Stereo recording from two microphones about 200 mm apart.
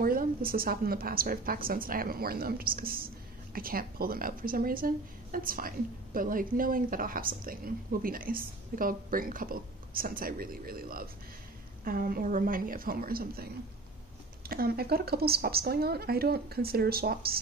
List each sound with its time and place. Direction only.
0.0 s speech: 45° right (ahead or behind)